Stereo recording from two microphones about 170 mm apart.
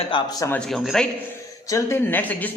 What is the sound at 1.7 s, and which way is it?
Speech, 15° left (ahead or behind).